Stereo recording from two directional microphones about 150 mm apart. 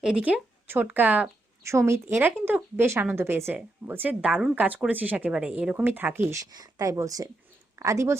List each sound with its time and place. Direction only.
0.0 s speech: 5° right (ahead or behind)
6.4 s speech: 25° right (ahead or behind)